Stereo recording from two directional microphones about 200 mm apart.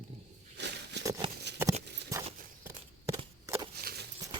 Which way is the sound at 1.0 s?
15° right (ahead or behind).